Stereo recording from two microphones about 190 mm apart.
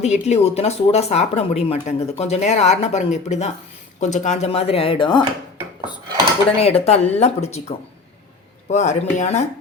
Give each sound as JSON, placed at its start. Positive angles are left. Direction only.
{"t": 0.0, "sound": "speech", "side_deg": 35}
{"t": 6.6, "sound": "speech", "side_deg": 35}